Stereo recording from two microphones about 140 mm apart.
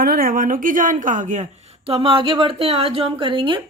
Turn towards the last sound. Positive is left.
turn(degrees=-35)  # may be behind; listen again after turning